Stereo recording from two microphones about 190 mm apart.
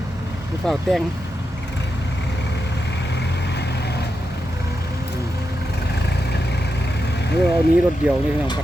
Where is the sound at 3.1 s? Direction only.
65° left (ahead or behind).